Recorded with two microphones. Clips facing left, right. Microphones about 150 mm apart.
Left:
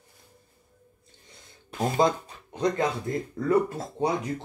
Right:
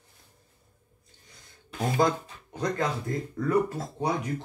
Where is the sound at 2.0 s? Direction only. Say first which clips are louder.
Left 1 dB; 20° left (ahead or behind).